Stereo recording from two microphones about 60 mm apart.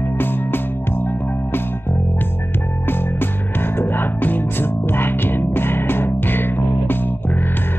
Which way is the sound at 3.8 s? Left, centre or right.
Left.